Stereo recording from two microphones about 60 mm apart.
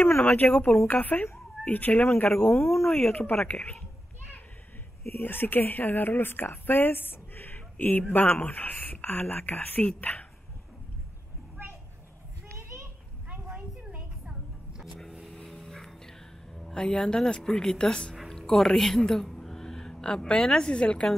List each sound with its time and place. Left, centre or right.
0.0 s speech: left
2.6 s speech: centre
3.1 s speech: left
3.5 s speech: centre
5.1 s speech: left
12.5 s a sound: right
15.4 s music: centre
16.5 s a woman's voice: centre